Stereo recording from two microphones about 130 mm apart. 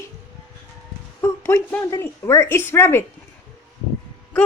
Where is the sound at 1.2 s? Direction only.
15° left (ahead or behind).